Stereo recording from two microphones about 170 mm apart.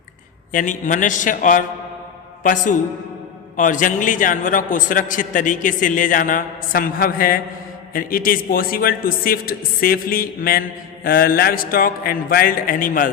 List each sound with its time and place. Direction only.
0.5 s a man's voice: 50° left (ahead or behind)